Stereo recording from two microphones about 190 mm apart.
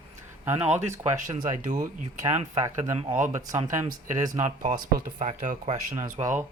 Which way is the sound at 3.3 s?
15° right (ahead or behind).